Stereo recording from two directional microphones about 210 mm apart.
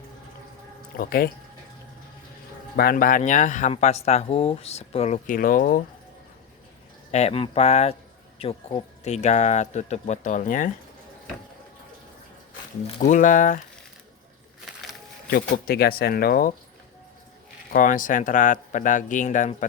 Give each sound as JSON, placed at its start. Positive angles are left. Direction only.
{"t": 0.9, "sound": "speech", "side_deg": 45}
{"t": 2.7, "sound": "speech", "side_deg": 45}
{"t": 7.1, "sound": "speech", "side_deg": 30}
{"t": 13.0, "sound": "speech", "side_deg": 35}
{"t": 14.6, "sound": "a sound", "side_deg": 0}
{"t": 15.3, "sound": "speech", "side_deg": 45}
{"t": 17.7, "sound": "speech", "side_deg": 40}